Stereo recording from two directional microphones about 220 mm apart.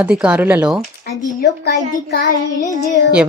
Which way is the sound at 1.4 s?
45° left (ahead or behind).